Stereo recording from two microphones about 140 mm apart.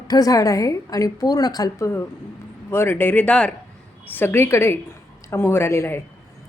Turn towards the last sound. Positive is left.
turn(degrees=20)  # may be behind; listen again after turning